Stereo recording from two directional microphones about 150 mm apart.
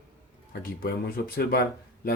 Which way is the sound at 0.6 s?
80° left.